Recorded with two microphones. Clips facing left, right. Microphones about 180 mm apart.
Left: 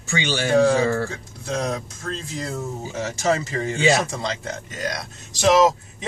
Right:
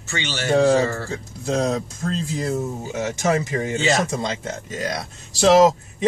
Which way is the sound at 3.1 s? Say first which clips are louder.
Even; 20° right (ahead or behind).